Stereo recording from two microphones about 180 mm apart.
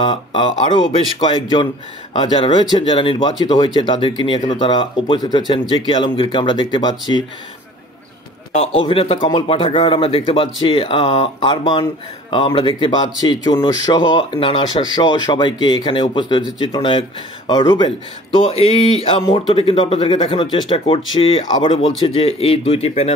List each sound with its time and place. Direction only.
0.0 s speech: 25° left (ahead or behind)
8.5 s speech: 30° left (ahead or behind)